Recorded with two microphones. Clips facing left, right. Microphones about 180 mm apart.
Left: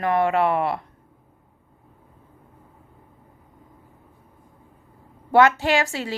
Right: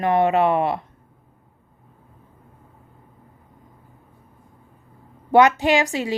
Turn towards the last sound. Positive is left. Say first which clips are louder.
# right 3 dB
turn(degrees=-15)  # may be behind; listen again after turning